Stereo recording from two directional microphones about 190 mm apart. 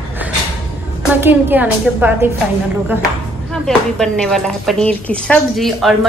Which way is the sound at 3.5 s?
Centre (ahead or behind).